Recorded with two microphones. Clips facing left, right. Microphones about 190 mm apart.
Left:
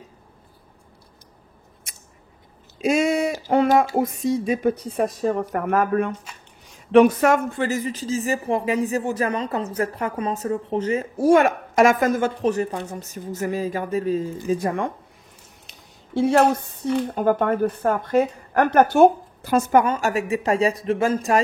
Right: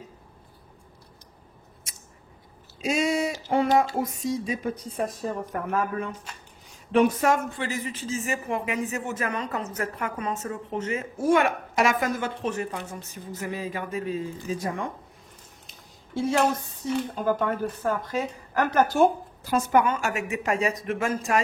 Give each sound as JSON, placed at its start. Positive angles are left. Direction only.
{"t": 1.9, "sound": "scissors", "side_deg": 55}
{"t": 2.8, "sound": "speech", "side_deg": 55}
{"t": 16.2, "sound": "a woman's voice", "side_deg": 65}
{"t": 19.8, "sound": "speech", "side_deg": 40}